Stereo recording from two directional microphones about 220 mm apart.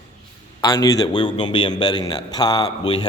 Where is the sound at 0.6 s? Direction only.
15° left (ahead or behind).